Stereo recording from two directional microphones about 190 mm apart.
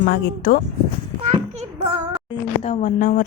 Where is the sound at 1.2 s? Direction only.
35° right (ahead or behind).